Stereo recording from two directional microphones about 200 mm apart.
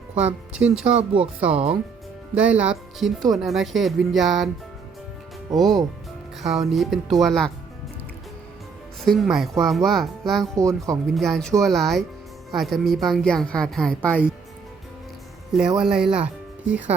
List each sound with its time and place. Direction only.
0.5 s speech: 5° right (ahead or behind)
5.5 s speech: centre (ahead or behind)
9.0 s speech: centre (ahead or behind)
10.6 s speech: 15° right (ahead or behind)
11.0 s speech: centre (ahead or behind)
15.5 s speech: 5° right (ahead or behind)